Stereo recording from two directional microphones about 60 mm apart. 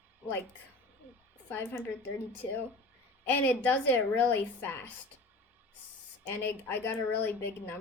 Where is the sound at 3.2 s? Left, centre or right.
Left.